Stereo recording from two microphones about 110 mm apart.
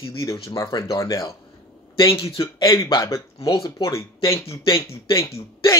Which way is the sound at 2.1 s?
55° left (ahead or behind).